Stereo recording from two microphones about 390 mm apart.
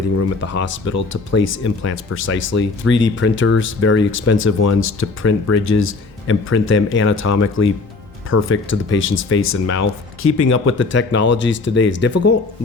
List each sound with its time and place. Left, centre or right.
0.2 s speech: left
0.6 s speech: left